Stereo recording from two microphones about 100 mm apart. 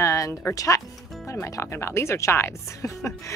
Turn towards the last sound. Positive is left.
turn(degrees=30)  # may be behind; listen again after turning